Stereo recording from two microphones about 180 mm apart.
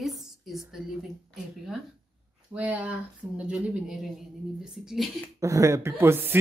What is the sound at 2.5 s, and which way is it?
Speech, 10° right (ahead or behind).